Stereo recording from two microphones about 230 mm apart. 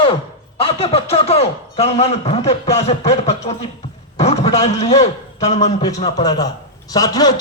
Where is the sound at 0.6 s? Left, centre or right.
Left.